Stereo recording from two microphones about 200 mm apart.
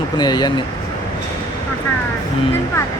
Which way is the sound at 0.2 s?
20° left (ahead or behind).